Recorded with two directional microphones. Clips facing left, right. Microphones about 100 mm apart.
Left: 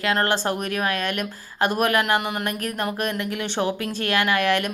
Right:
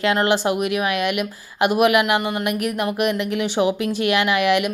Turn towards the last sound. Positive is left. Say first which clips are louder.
# right 3 dB
turn(degrees=-15)  # may be behind; listen again after turning